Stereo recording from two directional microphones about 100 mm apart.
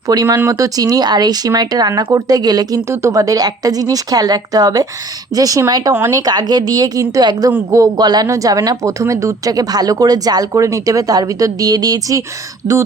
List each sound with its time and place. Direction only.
0.1 s speech: 40° right (ahead or behind)
2.9 s speech: 30° right (ahead or behind)
5.9 s speech: 25° right (ahead or behind)
6.1 s speech: 40° right (ahead or behind)